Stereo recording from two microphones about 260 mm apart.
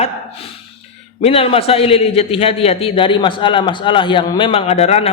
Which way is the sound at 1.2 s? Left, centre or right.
Left.